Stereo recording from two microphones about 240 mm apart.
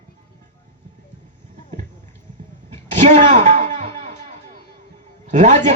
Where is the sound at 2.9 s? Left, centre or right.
Right.